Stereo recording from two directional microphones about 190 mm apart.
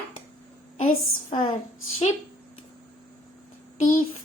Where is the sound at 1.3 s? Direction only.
30° left (ahead or behind).